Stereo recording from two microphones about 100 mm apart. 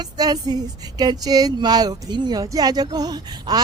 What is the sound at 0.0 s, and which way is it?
Speech, 45° right (ahead or behind).